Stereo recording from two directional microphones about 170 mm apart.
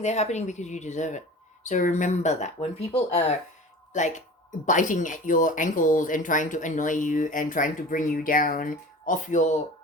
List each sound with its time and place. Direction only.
0.0 s speech: 40° left (ahead or behind)